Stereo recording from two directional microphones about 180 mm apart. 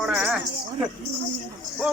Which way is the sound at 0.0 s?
5° right (ahead or behind).